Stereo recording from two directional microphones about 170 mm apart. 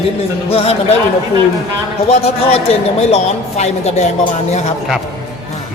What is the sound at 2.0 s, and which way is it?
A woman's voice, 35° left (ahead or behind).